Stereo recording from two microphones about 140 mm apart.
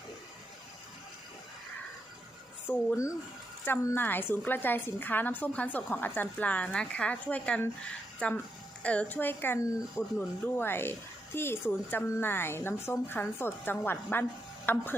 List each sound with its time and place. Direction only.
2.6 s a woman's voice: 15° left (ahead or behind)